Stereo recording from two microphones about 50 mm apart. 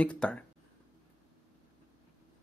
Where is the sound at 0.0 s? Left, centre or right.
Left.